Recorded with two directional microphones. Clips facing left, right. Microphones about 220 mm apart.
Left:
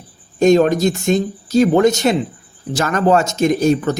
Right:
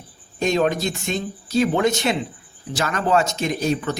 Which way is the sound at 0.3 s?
45° left (ahead or behind).